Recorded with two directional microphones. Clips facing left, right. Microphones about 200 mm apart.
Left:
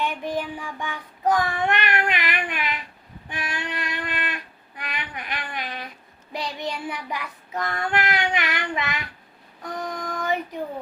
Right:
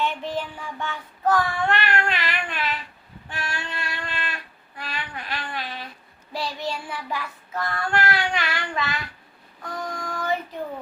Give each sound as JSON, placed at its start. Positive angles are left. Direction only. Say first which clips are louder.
{"t": 0.0, "sound": "child singing", "louder": "even", "side_deg": 15}